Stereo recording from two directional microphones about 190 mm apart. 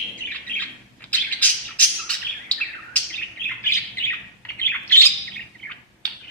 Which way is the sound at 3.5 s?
10° left (ahead or behind).